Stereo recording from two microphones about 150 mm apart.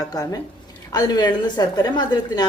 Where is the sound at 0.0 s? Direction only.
25° left (ahead or behind).